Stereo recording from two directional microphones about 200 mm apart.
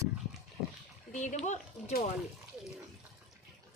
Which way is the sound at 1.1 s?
35° left (ahead or behind).